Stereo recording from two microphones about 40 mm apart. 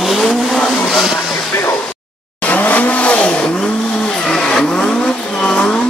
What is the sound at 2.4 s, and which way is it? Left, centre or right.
Vehicle, left.